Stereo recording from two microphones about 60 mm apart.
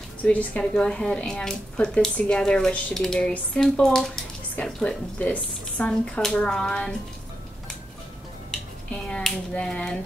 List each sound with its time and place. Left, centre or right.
0.2 s a woman's voice: left
0.7 s speech: centre
5.2 s a woman's voice: left
5.9 s speech: centre
8.5 s a sound: centre